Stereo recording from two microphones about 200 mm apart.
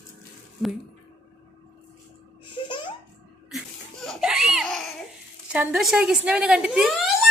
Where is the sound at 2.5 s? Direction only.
25° left (ahead or behind).